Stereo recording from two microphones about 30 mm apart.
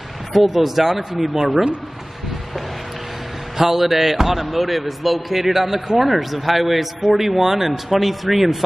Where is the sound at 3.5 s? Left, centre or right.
Centre.